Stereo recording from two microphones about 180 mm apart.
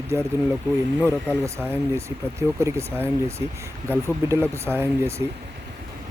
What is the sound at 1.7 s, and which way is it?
Speech, 15° right (ahead or behind).